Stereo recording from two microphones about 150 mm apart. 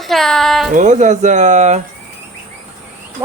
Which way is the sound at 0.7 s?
55° right (ahead or behind).